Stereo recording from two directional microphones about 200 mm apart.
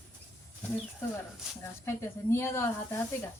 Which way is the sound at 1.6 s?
15° left (ahead or behind).